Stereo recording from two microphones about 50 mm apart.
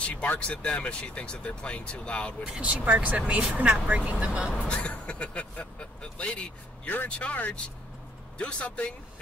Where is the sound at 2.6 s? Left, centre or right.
Right.